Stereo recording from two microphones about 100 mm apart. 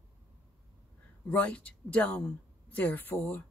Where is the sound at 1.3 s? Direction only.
10° left (ahead or behind).